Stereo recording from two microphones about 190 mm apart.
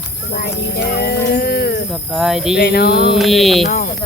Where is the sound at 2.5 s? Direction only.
55° left (ahead or behind).